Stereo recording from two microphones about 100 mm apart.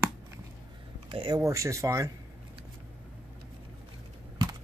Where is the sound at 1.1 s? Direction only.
55° right (ahead or behind).